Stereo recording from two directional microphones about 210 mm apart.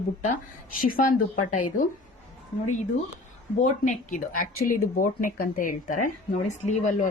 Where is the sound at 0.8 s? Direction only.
40° left (ahead or behind).